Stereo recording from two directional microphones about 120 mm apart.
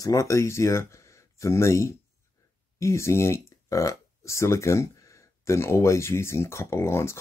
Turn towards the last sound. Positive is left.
turn(degrees=20)  # may be behind; listen again after turning